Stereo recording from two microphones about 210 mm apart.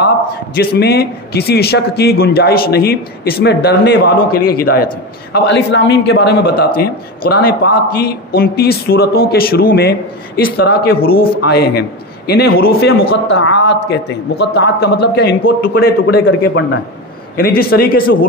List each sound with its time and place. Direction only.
0.0 s a man's voice: 50° left (ahead or behind)
5.3 s a man's voice: 55° left (ahead or behind)
13.1 s a man's voice: 60° left (ahead or behind); by 18.2 s 45° left (ahead or behind)